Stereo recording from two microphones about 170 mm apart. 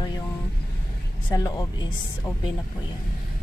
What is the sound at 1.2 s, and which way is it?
A woman's voice, 25° left (ahead or behind).